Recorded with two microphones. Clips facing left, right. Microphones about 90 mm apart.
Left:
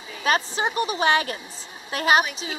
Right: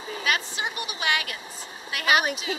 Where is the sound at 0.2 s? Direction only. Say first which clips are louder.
Left 6 dB; 35° left (ahead or behind).